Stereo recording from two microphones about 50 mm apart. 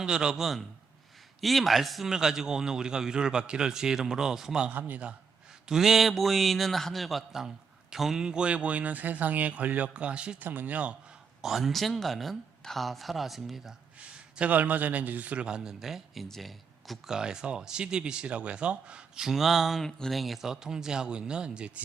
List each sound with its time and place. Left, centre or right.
0.0 s a man's voice: centre
4.7 s a man's voice: right
5.6 s a man's voice: centre
10.4 s a man's voice: right
11.4 s speech: centre
14.5 s a man's voice: right; by 15.7 s centre
15.8 s speech: centre
17.1 s speech: centre
19.2 s a man's voice: centre